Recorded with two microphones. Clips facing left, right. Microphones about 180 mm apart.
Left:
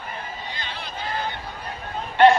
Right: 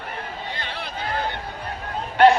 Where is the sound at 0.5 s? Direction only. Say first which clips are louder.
Right 2 dB; 60° right (ahead or behind).